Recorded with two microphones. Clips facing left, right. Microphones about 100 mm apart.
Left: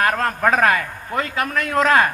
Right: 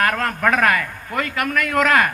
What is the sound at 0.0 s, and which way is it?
A man's voice, 30° left (ahead or behind).